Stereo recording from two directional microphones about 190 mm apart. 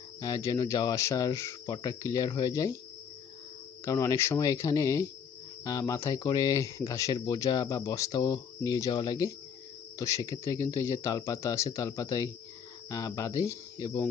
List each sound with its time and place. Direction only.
0.2 s speech: 20° left (ahead or behind)
3.8 s speech: 15° left (ahead or behind)